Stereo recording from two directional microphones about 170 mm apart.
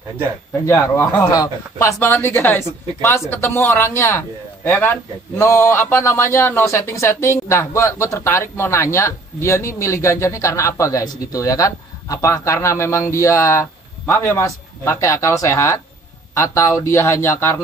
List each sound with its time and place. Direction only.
0.7 s a man's voice: 10° left (ahead or behind)